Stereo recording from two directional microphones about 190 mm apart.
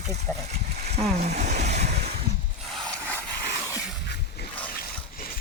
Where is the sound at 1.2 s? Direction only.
35° right (ahead or behind).